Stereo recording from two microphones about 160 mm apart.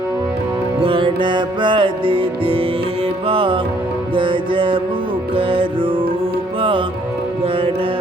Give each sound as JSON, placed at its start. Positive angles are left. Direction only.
{"t": 0.8, "sound": "music", "side_deg": -35}